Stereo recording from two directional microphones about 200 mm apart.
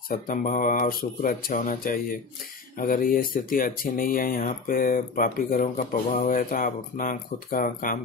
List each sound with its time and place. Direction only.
0.1 s speech: 45° left (ahead or behind)